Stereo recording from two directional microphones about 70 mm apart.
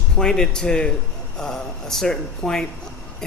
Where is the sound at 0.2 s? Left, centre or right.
Centre.